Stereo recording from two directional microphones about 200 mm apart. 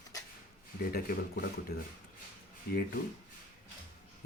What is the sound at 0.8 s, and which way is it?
Speech, 50° left (ahead or behind).